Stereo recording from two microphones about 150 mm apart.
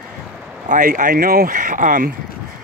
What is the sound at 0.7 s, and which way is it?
Speech, 60° right (ahead or behind).